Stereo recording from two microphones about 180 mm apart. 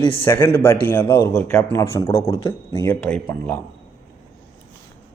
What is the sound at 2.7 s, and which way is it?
Speech, 10° left (ahead or behind).